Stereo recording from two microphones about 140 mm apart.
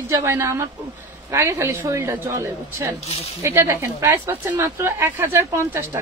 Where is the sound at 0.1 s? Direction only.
20° right (ahead or behind).